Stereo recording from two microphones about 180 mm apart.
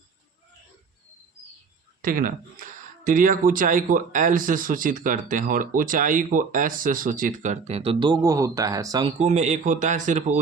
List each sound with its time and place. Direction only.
2.0 s speech: 50° right (ahead or behind); by 9.1 s 20° right (ahead or behind)
9.1 s speech: 40° right (ahead or behind)